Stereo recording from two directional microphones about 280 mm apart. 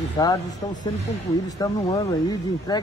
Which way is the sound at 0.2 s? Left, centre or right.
Centre.